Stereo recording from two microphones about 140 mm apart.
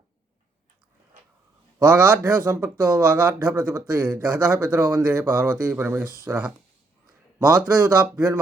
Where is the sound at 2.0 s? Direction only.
15° right (ahead or behind).